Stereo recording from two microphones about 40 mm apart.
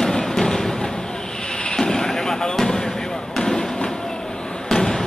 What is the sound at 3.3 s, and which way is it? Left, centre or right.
Basketball bounce, centre.